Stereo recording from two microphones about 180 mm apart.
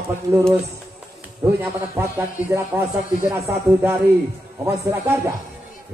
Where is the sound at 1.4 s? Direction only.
10° right (ahead or behind).